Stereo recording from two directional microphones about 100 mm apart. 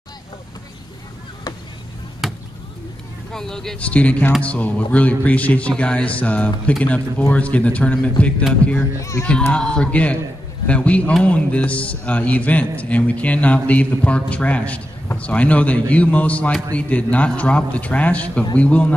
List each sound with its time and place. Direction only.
2.2 s basketball bounce: 5° right (ahead or behind)
3.3 s a man's voice: 5° left (ahead or behind)
9.0 s a child's voice: 30° left (ahead or behind)
9.3 s a man's voice: 10° left (ahead or behind)